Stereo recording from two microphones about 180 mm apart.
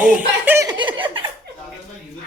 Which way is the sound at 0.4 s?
15° right (ahead or behind).